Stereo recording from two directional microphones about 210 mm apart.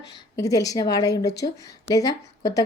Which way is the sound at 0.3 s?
15° left (ahead or behind).